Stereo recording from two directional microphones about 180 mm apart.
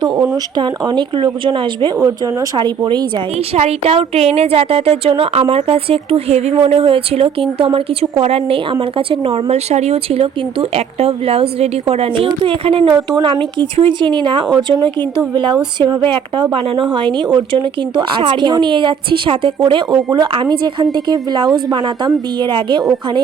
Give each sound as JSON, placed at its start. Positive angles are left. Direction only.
{"t": 0.0, "sound": "a woman's voice", "side_deg": -20}